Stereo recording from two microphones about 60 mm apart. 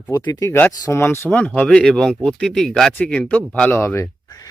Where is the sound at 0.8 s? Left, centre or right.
Left.